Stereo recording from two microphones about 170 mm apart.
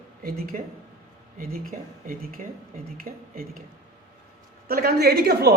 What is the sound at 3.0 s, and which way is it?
Speech, 60° right (ahead or behind).